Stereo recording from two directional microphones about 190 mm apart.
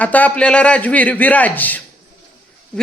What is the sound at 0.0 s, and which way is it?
A man's voice, 10° left (ahead or behind).